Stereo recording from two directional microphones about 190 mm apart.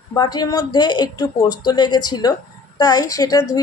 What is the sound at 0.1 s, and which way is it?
A woman's voice, 20° left (ahead or behind).